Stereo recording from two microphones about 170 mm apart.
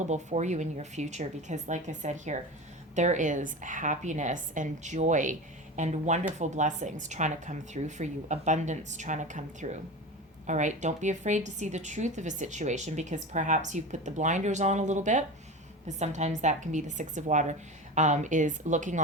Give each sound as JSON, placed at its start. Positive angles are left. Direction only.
{"t": 0.1, "sound": "a woman's voice", "side_deg": -45}